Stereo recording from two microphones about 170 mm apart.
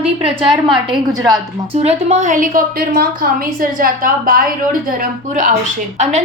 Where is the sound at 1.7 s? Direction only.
40° right (ahead or behind).